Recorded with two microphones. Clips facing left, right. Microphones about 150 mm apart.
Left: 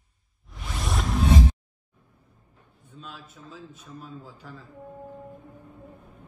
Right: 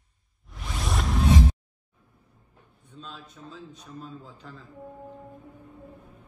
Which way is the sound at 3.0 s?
5° left (ahead or behind).